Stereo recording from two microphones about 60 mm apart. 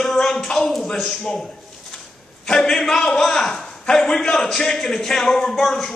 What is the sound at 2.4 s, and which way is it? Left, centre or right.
A man's voice, centre.